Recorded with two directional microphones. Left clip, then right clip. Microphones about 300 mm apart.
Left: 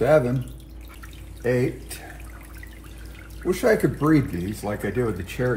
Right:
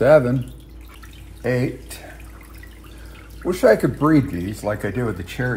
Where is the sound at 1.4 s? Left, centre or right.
Right.